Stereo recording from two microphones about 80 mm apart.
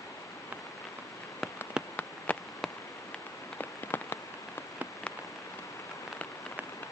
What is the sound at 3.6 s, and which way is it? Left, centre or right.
Rain on surface, left.